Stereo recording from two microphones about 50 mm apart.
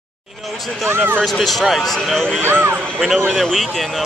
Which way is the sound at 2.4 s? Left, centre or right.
Right.